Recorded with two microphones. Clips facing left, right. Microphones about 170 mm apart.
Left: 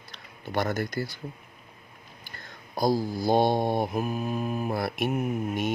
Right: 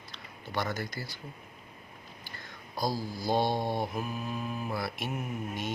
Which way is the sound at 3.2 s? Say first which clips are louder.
Left 5 dB; 55° left (ahead or behind).